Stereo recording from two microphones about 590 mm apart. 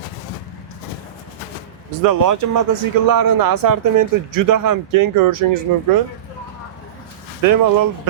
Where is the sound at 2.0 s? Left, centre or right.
Right.